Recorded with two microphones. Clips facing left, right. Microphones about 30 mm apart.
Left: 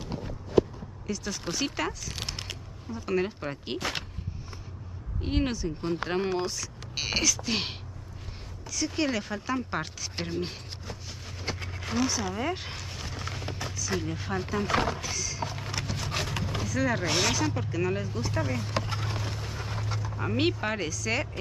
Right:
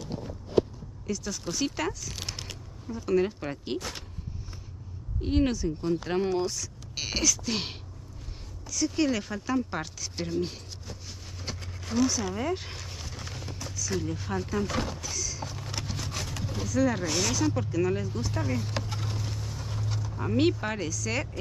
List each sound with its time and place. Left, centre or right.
1.0 s speech: centre
3.7 s speech: left
5.2 s speech: centre
11.6 s a sound: left
13.7 s speech: centre
15.7 s a sound: centre
16.1 s a sound: left
16.6 s speech: centre
17.0 s speech: left
17.6 s speech: centre
18.9 s vehicle: left
20.2 s speech: centre